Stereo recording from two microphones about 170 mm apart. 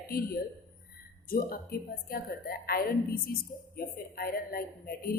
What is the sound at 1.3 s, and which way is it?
A woman's voice, 60° left (ahead or behind).